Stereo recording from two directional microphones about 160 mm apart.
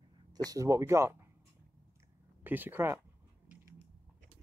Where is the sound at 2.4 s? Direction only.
10° right (ahead or behind).